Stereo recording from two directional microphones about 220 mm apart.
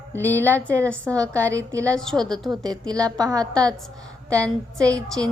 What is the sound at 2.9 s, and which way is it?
Speech, 15° right (ahead or behind).